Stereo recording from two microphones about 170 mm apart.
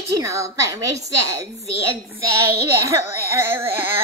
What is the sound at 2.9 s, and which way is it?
A woman's voice, 15° right (ahead or behind).